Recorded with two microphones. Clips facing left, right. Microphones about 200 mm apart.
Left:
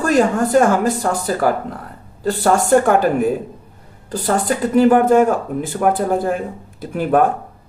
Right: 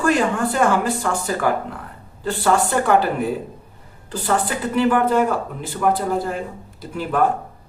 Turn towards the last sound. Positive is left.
turn(degrees=55)  # may be behind; listen again after turning